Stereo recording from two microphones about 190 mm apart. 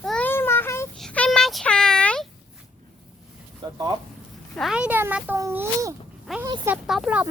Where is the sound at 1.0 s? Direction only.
5° left (ahead or behind).